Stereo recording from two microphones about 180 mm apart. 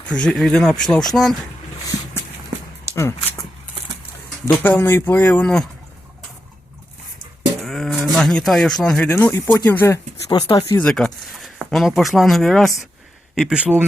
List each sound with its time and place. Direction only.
0.1 s speech: 5° left (ahead or behind)
2.9 s speech: 15° left (ahead or behind)
4.4 s speech: 10° left (ahead or behind)
7.6 s a sound: centre (ahead or behind)
8.1 s speech: centre (ahead or behind); by 10.5 s 20° left (ahead or behind)
10.8 s speech: 5° left (ahead or behind)